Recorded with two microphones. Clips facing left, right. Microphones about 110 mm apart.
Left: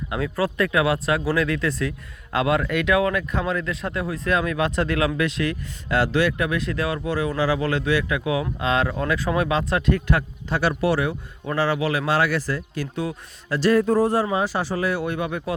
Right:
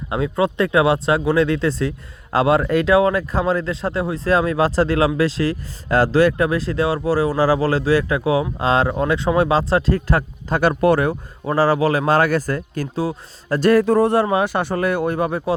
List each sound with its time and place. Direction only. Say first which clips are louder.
0.1 s speech: right 5 dB; 25° right (ahead or behind); by 13.7 s 50° right (ahead or behind)
13.7 s speech: right 3 dB; 75° right (ahead or behind); by 15.5 s 35° right (ahead or behind)